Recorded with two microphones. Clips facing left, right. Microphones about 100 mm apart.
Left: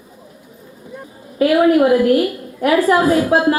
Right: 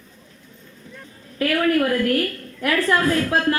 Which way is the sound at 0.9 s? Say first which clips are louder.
Left 8 dB; 15° left (ahead or behind).